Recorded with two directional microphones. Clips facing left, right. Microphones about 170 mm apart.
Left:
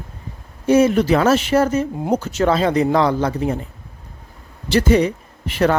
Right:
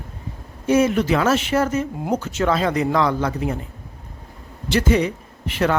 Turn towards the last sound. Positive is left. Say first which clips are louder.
# left 3 dB
turn(degrees=40)  # may be behind; listen again after turning